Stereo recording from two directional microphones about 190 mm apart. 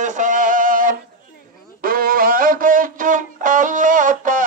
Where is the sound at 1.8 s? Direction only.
50° right (ahead or behind).